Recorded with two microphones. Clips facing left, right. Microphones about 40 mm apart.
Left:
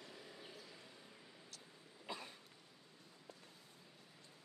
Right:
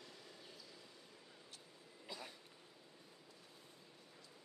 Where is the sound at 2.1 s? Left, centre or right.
Left.